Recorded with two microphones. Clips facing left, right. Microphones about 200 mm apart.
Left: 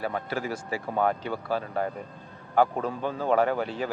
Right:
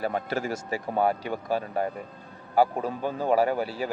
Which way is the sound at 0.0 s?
25° right (ahead or behind).